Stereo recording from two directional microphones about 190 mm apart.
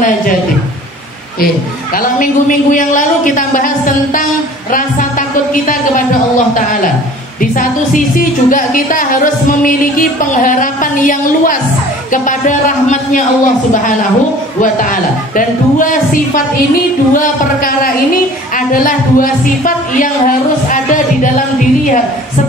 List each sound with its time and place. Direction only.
2.0 s a woman's voice: 45° left (ahead or behind)
5.5 s a woman's voice: 45° left (ahead or behind)
7.5 s a woman's voice: 45° left (ahead or behind)
15.3 s a woman's voice: 45° left (ahead or behind)